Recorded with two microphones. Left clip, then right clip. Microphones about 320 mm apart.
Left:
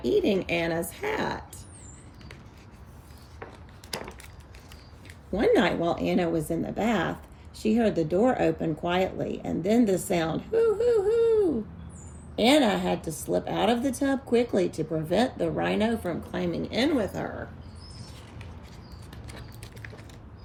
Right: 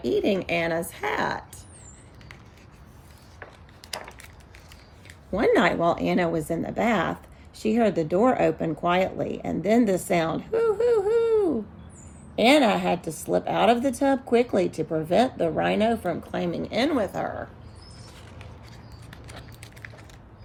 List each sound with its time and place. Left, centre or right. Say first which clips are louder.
0.0 s speech: even; centre
3.9 s wood: even; centre
5.3 s speech: right 2 dB; centre
19.3 s a sound: right 1 dB; centre